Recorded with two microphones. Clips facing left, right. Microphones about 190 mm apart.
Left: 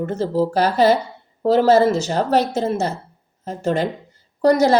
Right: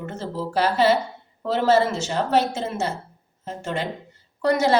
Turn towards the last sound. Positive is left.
turn(degrees=40)  # may be behind; listen again after turning